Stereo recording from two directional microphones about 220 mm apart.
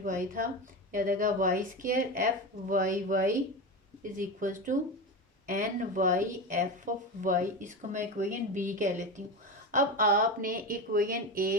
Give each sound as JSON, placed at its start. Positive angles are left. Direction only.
{"t": 0.0, "sound": "speech", "side_deg": -40}